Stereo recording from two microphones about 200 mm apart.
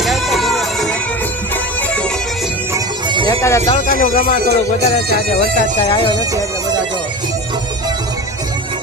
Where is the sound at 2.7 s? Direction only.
25° right (ahead or behind).